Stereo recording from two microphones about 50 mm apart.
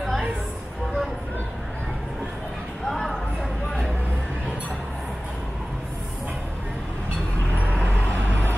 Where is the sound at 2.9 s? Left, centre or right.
Centre.